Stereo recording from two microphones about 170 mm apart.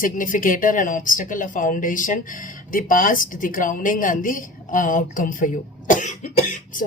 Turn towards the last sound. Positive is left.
turn(degrees=45)  # may be behind; listen again after turning